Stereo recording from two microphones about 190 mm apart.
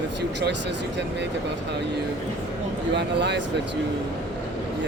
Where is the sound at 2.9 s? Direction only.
65° right (ahead or behind).